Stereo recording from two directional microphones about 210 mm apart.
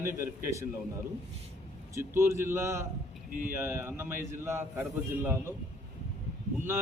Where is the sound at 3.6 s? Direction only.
10° right (ahead or behind).